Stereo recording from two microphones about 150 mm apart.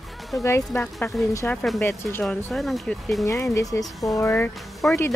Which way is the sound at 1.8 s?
15° left (ahead or behind).